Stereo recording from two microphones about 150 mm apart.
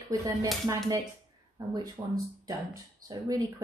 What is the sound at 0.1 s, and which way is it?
Speech, 20° right (ahead or behind).